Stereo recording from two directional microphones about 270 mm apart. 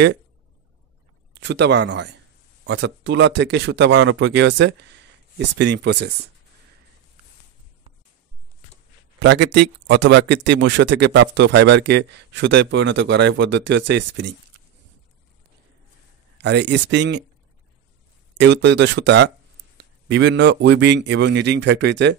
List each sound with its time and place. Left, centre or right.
1.3 s a man's voice: right
9.2 s a man's voice: right
16.3 s a man's voice: right
18.4 s a man's voice: right